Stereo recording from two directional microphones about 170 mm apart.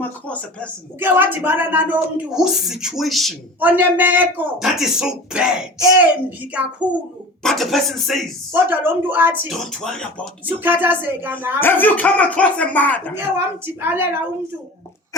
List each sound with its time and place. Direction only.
0.0 s speech: 10° left (ahead or behind)
0.9 s speech: 10° right (ahead or behind)
3.6 s speech: 10° right (ahead or behind)
8.5 s speech: 10° right (ahead or behind)
9.5 s speech: 5° left (ahead or behind)
10.6 s speech: 10° right (ahead or behind)
11.6 s speech: 10° left (ahead or behind)
13.8 s speech: 10° right (ahead or behind)